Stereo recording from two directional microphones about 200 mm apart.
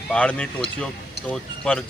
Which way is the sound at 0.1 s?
5° left (ahead or behind).